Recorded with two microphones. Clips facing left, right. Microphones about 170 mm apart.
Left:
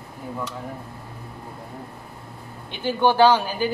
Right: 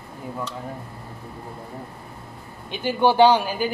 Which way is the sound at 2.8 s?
15° right (ahead or behind).